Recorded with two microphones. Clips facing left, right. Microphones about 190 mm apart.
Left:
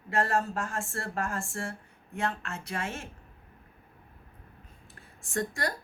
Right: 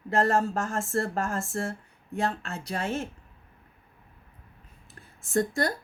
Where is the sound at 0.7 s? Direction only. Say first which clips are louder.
Right 6 dB; 40° right (ahead or behind).